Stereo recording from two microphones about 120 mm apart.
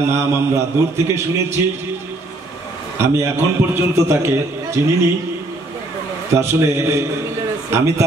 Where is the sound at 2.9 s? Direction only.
20° right (ahead or behind).